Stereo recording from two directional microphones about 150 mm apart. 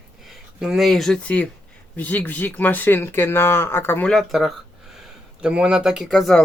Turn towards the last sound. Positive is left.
turn(degrees=0)  # may be behind; listen again after turning